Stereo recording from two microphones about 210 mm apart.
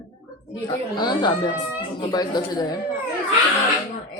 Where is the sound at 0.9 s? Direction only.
20° left (ahead or behind).